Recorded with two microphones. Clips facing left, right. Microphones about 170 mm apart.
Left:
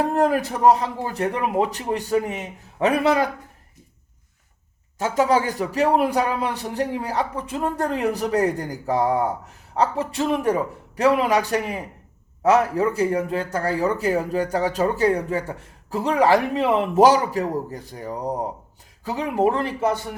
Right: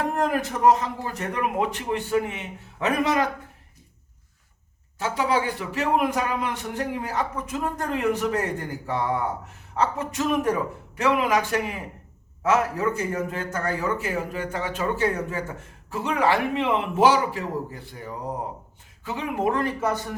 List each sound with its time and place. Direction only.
0.0 s speech: 35° left (ahead or behind)
4.9 s speech: 45° left (ahead or behind); by 20.0 s 25° left (ahead or behind)